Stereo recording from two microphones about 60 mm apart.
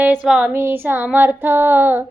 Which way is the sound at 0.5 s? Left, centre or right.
Right.